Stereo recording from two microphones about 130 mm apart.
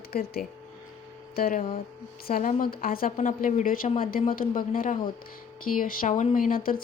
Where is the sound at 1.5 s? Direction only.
90° left.